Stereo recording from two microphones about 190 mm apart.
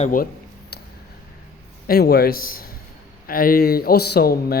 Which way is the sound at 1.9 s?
55° left (ahead or behind).